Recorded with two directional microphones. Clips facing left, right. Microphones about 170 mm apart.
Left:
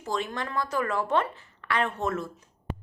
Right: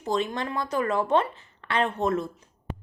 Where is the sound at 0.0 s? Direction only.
20° right (ahead or behind).